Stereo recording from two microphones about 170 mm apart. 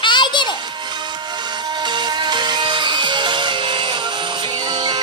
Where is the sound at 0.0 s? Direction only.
25° left (ahead or behind).